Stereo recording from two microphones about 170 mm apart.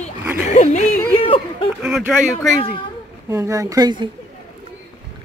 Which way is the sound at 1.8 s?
5° right (ahead or behind).